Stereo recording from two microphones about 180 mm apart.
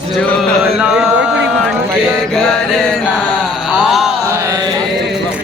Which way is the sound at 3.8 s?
Centre (ahead or behind).